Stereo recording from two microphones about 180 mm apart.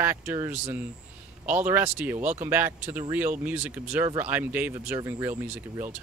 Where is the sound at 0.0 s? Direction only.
10° right (ahead or behind).